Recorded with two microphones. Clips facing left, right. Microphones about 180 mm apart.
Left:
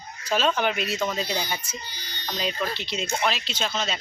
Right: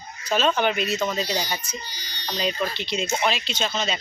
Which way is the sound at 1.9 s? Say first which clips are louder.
Right 1 dB; 55° left (ahead or behind).